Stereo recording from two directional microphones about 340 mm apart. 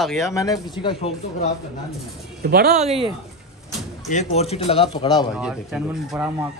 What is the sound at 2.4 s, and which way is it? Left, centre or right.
Speech, right.